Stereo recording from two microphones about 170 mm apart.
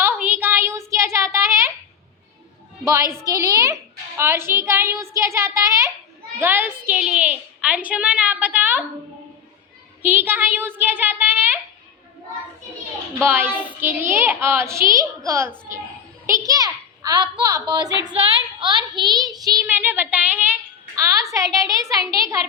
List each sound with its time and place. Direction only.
0.0 s a sound: 10° right (ahead or behind)
2.8 s a child's voice: 15° right (ahead or behind)
10.0 s a woman's voice: 10° right (ahead or behind)
13.2 s a woman's voice: 10° right (ahead or behind)
16.5 s a child's voice: 20° right (ahead or behind)
19.6 s a woman's voice: 10° right (ahead or behind)